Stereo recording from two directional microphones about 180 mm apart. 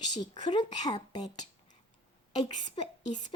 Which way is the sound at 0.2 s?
25° left (ahead or behind).